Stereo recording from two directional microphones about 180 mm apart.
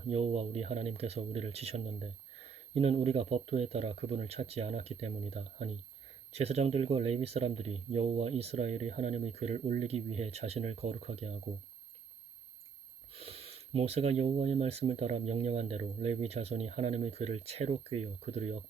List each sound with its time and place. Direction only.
0.1 s speech: 35° right (ahead or behind)
13.1 s speech: 35° right (ahead or behind)